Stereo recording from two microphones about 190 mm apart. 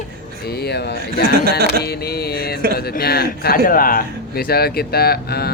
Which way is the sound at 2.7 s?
55° left (ahead or behind).